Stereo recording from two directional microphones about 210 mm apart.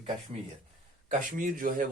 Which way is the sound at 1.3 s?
40° right (ahead or behind).